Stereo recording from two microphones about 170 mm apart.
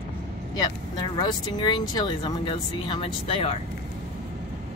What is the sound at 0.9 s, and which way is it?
Speech, 25° left (ahead or behind).